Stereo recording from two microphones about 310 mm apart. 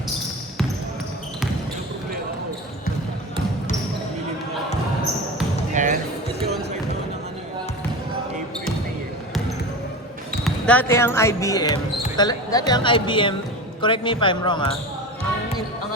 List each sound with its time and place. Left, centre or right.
5.7 s music: right
10.4 s speech: centre